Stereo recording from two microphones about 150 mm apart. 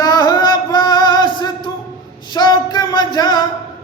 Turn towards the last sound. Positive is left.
turn(degrees=30)  # may be behind; listen again after turning